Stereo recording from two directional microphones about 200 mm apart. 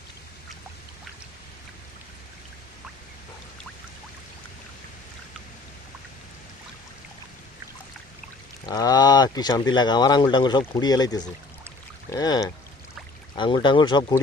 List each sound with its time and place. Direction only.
8.6 s speech: 20° left (ahead or behind)